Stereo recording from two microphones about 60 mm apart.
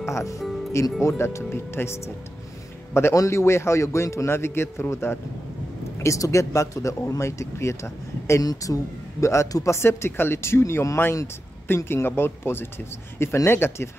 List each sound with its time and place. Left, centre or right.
0.0 s music: left
1.0 s a man's voice: left
6.0 s speech: left
8.4 s speech: left
9.2 s speech: left
9.8 s a man's voice: left